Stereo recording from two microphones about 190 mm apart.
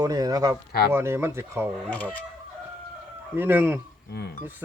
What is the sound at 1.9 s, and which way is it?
Speech, 10° left (ahead or behind).